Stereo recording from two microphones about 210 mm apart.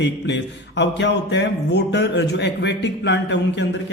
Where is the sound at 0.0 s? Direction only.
55° left (ahead or behind).